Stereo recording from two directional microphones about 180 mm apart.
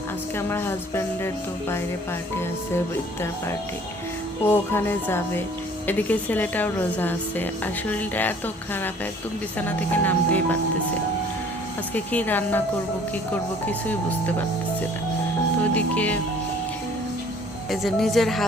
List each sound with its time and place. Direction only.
0.3 s speech: 15° left (ahead or behind)
4.4 s speech: 10° left (ahead or behind)
11.9 s speech: 10° left (ahead or behind)
13.7 s speech: 10° left (ahead or behind)
15.7 s speech: 10° left (ahead or behind)
17.7 s a woman's voice: centre (ahead or behind)